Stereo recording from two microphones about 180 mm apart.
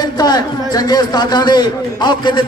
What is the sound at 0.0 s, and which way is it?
A man's voice, 25° left (ahead or behind).